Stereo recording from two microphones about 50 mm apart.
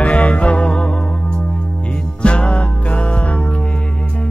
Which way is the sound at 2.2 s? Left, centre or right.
Left.